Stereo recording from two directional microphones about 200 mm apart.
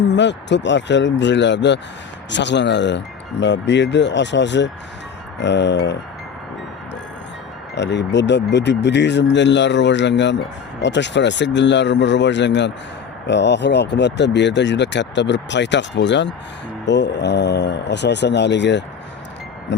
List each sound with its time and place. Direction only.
0.1 s speech: 60° left (ahead or behind)
7.8 s speech: 60° left (ahead or behind)